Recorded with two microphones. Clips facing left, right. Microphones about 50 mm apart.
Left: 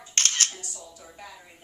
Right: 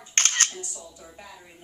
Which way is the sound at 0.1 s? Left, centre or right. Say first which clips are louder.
Right 2 dB; right.